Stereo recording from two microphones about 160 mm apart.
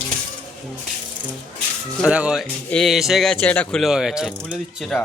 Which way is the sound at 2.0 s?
5° right (ahead or behind).